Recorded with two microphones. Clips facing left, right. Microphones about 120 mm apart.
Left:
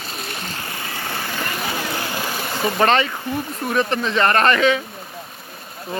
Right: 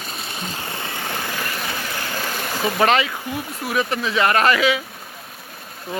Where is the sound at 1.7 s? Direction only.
20° left (ahead or behind); by 4.8 s 5° right (ahead or behind).